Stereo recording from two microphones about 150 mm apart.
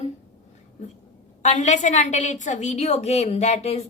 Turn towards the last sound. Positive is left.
turn(degrees=45)  # may be behind; listen again after turning